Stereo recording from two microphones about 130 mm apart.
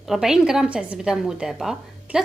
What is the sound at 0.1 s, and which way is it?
A woman's voice, 5° right (ahead or behind).